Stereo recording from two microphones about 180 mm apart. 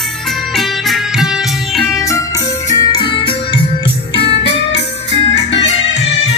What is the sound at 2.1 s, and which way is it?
Organ, 20° left (ahead or behind).